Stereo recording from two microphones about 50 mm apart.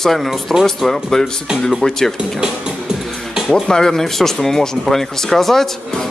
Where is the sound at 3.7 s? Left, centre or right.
Centre.